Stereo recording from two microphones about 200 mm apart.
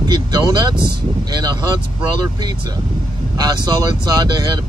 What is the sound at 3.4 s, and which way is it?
Speech, 20° right (ahead or behind).